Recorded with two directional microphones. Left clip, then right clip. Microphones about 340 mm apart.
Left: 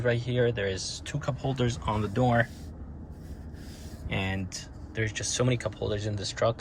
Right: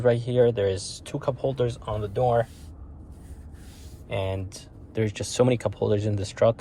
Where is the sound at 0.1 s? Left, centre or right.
Centre.